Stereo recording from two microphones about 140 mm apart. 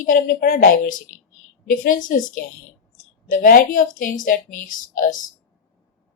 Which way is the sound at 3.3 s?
90° left.